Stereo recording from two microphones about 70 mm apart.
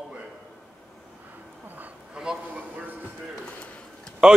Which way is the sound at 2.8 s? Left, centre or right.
Right.